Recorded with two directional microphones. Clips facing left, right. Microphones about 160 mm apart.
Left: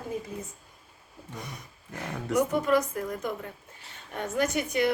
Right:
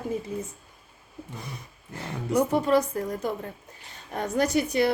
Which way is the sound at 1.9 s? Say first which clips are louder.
Right 2 dB; 30° right (ahead or behind).